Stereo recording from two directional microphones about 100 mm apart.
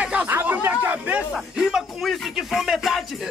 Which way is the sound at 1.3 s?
5° right (ahead or behind).